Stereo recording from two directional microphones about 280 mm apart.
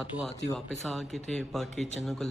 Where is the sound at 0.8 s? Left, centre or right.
Centre.